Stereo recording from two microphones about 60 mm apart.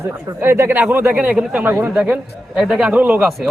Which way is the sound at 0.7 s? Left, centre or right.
Right.